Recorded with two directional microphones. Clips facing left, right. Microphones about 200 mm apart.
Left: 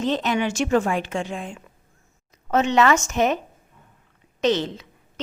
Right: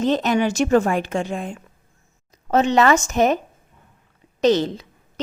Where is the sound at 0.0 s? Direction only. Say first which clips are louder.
Right 4 dB; 45° right (ahead or behind).